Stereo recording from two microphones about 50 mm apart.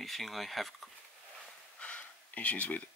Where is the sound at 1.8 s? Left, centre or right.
Left.